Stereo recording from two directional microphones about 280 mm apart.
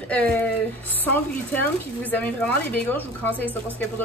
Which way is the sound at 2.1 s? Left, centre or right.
Centre.